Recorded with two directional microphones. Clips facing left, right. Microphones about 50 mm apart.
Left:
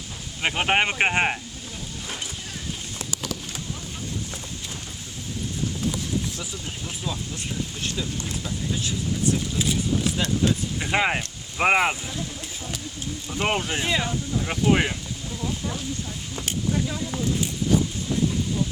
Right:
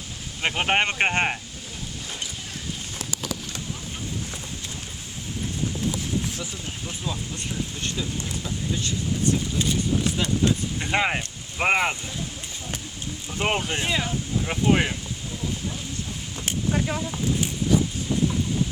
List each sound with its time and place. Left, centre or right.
0.4 s speech: centre
6.4 s speech: centre
13.3 s speech: centre
16.7 s speech: right